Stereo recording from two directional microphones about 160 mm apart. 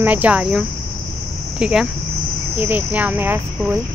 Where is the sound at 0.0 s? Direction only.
10° right (ahead or behind).